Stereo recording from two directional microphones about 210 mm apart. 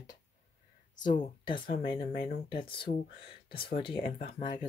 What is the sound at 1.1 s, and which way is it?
Speech, 20° left (ahead or behind).